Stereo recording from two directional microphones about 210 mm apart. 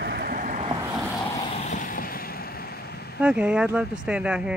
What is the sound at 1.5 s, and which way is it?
Vehicle, 35° left (ahead or behind).